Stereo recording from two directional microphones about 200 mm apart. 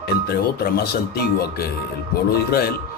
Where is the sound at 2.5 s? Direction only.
50° left (ahead or behind).